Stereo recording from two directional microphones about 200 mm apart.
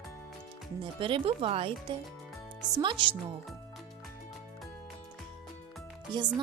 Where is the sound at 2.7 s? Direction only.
25° right (ahead or behind).